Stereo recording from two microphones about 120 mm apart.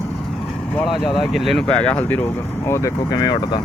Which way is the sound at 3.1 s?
40° left (ahead or behind).